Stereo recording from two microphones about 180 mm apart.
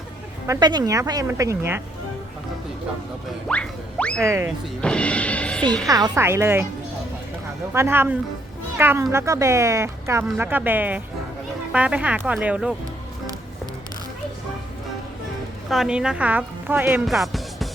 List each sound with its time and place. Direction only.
0.4 s a woman's voice: 20° right (ahead or behind)
3.5 s music: 5° left (ahead or behind)
4.2 s a woman's voice: 15° right (ahead or behind)
4.8 s speech: 5° left (ahead or behind)
5.9 s a woman's voice: 15° right (ahead or behind)
7.7 s a woman's voice: 15° right (ahead or behind)
15.7 s a woman's voice: 5° right (ahead or behind)
17.1 s music: centre (ahead or behind)